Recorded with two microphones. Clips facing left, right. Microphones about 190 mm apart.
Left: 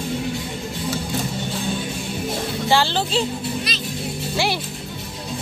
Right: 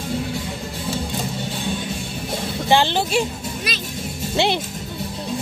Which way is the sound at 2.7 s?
15° right (ahead or behind).